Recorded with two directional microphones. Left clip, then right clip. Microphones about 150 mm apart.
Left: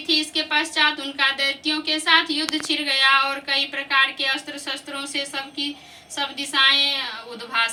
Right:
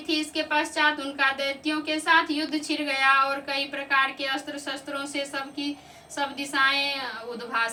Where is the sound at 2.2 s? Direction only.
10° right (ahead or behind).